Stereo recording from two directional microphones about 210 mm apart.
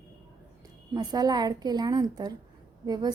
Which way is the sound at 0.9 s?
20° right (ahead or behind).